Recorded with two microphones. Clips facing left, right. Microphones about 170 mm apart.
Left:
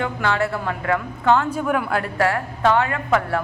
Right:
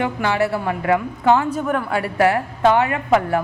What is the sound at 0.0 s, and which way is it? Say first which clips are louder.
A woman's voice: right 2 dB; 15° right (ahead or behind).